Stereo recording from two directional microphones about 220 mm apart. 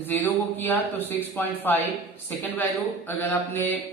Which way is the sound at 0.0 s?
10° left (ahead or behind).